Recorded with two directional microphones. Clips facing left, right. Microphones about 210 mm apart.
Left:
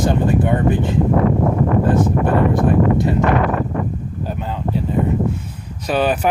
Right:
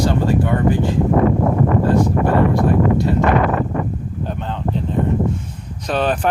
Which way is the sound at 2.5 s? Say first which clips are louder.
Even; 20° left (ahead or behind).